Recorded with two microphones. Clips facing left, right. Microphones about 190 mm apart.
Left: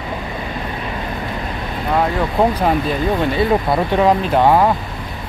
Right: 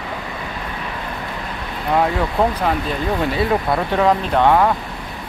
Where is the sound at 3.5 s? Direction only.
5° left (ahead or behind).